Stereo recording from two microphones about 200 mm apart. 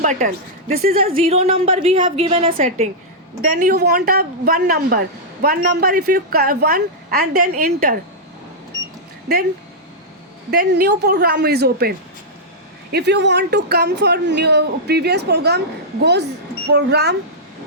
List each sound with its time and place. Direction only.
0.0 s a woman's voice: 40° right (ahead or behind)
1.2 s a woman's voice: 30° right (ahead or behind)
2.5 s a woman's voice: 40° right (ahead or behind)
10.5 s speech: 50° right (ahead or behind)
16.7 s speech: 55° right (ahead or behind)